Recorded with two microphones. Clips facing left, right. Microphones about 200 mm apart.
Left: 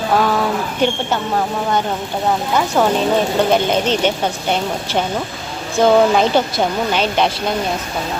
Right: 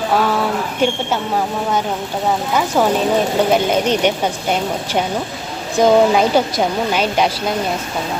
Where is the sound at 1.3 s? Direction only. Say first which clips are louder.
Left 1 dB; 10° right (ahead or behind).